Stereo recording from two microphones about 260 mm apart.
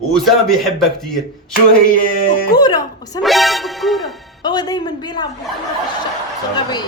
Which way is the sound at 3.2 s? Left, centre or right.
Centre.